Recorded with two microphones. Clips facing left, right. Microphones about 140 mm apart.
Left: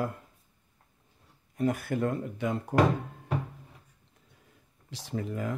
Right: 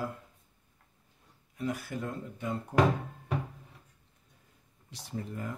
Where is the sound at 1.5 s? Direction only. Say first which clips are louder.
Left 6 dB; 50° left (ahead or behind); by 2.7 s 85° left.